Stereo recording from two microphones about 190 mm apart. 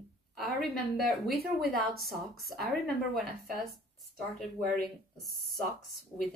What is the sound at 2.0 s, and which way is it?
Speech, 50° right (ahead or behind).